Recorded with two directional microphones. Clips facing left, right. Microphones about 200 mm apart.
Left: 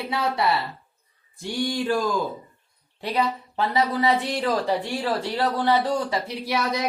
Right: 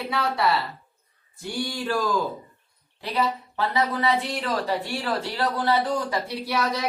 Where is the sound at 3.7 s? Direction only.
15° left (ahead or behind).